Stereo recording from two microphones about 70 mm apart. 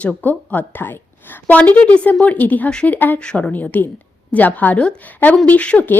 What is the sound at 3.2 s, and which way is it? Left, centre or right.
A woman's voice, centre.